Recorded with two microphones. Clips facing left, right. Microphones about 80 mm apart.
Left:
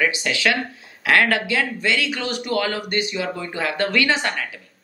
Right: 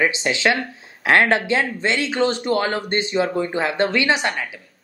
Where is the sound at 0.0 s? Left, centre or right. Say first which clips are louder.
Right 2 dB; right.